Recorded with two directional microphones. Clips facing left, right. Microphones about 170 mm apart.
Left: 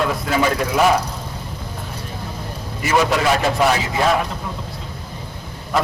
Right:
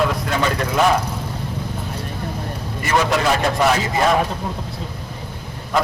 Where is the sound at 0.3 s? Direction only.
5° left (ahead or behind).